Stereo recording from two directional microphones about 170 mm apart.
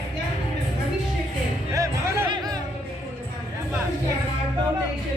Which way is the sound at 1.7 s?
20° right (ahead or behind).